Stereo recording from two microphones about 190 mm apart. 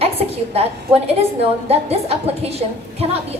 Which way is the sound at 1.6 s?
35° right (ahead or behind).